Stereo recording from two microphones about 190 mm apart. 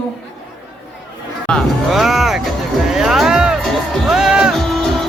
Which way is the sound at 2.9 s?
Centre (ahead or behind).